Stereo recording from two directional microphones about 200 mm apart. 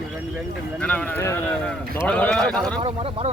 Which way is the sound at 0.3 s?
5° left (ahead or behind).